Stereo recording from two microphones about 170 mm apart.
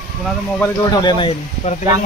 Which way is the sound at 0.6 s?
25° left (ahead or behind).